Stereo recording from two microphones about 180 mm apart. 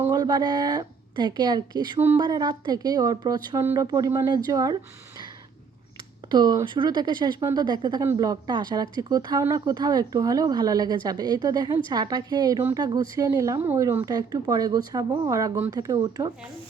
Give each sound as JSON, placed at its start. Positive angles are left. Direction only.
{"t": 0.0, "sound": "a woman's voice", "side_deg": -20}